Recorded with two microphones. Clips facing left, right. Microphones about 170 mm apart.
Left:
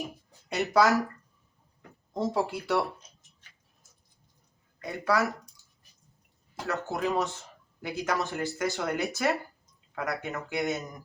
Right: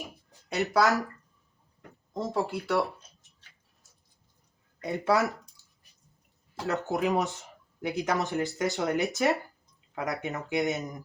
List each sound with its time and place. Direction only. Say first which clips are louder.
0.5 s speech: left 1 dB; centre (ahead or behind)
2.1 s speech: left 1 dB; centre (ahead or behind)
4.8 s speech: right 2 dB; 20° right (ahead or behind)
6.7 s speech: right 2 dB; 20° right (ahead or behind)